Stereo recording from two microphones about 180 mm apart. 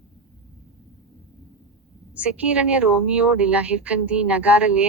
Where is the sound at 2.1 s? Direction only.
5° right (ahead or behind).